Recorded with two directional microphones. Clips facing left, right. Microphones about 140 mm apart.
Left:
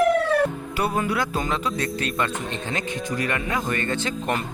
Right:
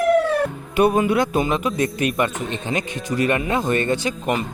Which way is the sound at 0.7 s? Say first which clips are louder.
Right 12 dB; 20° right (ahead or behind).